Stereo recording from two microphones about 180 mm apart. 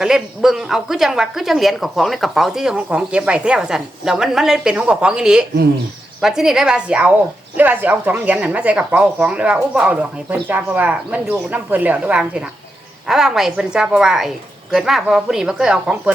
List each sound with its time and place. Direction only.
0.0 s a woman's voice: 5° right (ahead or behind)